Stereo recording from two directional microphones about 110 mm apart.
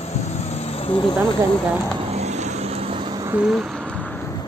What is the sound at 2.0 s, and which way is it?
Vehicle, 85° right.